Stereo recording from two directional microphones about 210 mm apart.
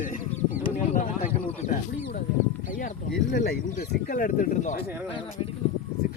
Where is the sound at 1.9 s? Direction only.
50° left (ahead or behind).